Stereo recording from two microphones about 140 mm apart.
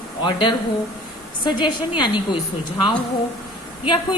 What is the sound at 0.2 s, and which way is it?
A woman's voice, 35° left (ahead or behind).